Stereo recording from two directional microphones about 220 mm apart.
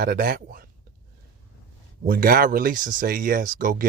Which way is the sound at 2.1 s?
40° right (ahead or behind).